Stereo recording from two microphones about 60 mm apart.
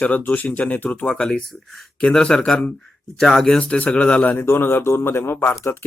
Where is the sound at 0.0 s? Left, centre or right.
Left.